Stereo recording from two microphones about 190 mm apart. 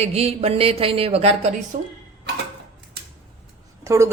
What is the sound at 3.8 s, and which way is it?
Speech, 15° right (ahead or behind).